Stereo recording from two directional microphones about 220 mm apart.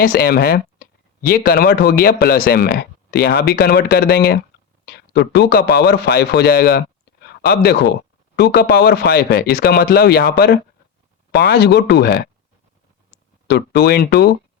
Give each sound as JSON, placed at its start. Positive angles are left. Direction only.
{"t": 0.0, "sound": "a man's voice", "side_deg": 40}
{"t": 13.5, "sound": "speech", "side_deg": 45}